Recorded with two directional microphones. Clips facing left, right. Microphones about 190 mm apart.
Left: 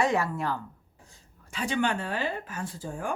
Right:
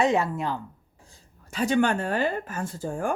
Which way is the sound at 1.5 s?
40° right (ahead or behind).